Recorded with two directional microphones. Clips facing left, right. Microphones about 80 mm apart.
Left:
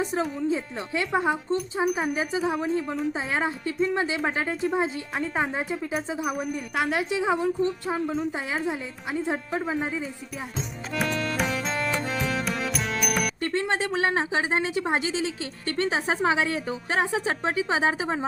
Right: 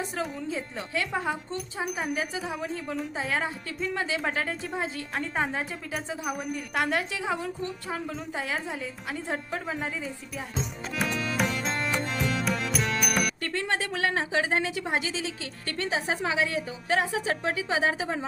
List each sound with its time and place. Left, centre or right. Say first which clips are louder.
0.2 s speech: left 5 dB; left
1.5 s a woman's voice: left 7 dB; centre
2.5 s speech: left 7 dB; left
2.8 s a woman's voice: left 4 dB; centre
3.1 s speech: left 3 dB; left
5.1 s a woman's voice: left 1 dB; centre
7.1 s speech: left 7 dB; left
8.0 s a woman's voice: left 5 dB; centre
8.6 s a woman's voice: left 4 dB; centre
10.9 s music: left 2 dB; centre
13.4 s speech: left 4 dB; left